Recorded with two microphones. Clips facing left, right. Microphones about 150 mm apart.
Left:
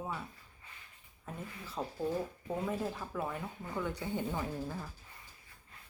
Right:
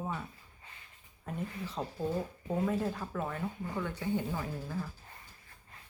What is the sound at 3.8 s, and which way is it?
Speech, 15° left (ahead or behind).